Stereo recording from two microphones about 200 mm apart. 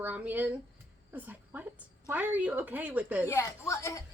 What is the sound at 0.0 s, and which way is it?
A woman's voice, 10° right (ahead or behind).